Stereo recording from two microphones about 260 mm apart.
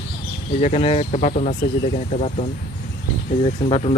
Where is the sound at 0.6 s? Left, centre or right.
Left.